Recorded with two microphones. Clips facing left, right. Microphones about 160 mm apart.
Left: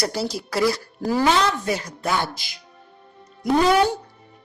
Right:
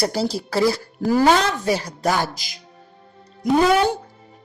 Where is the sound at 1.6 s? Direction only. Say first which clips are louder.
Right 4 dB; 35° right (ahead or behind).